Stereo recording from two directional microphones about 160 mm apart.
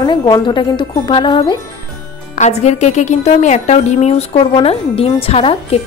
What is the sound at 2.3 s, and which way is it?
Speech, 45° left (ahead or behind).